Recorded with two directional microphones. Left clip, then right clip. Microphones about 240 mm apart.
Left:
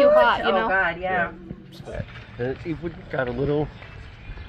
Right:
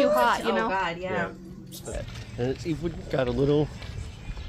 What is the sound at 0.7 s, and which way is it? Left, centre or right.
Speech, right.